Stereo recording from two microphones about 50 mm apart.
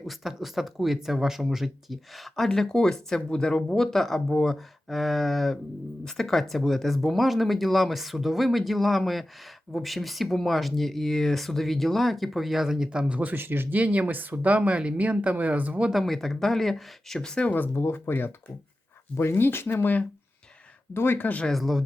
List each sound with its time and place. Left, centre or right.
0.0 s speech: centre
2.6 s speech: centre
13.1 s speech: right
13.7 s speech: right
15.9 s speech: centre
17.7 s speech: left
21.5 s speech: centre